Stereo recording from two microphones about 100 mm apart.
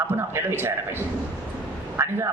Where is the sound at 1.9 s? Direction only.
25° right (ahead or behind).